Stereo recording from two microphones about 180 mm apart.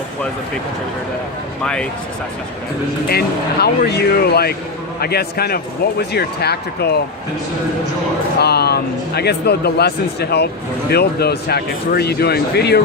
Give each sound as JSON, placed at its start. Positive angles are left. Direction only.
{"t": 1.6, "sound": "speech", "side_deg": 5}
{"t": 3.1, "sound": "speech", "side_deg": 60}
{"t": 8.4, "sound": "speech", "side_deg": 65}